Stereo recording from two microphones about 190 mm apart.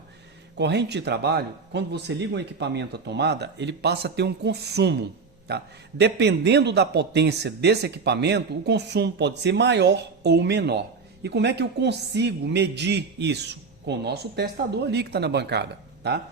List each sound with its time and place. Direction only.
0.5 s a man's voice: 65° right (ahead or behind)